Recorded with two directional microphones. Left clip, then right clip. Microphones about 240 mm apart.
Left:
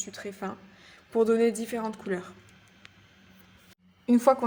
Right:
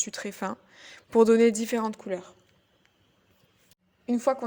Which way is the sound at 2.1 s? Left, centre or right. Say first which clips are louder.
Even; centre.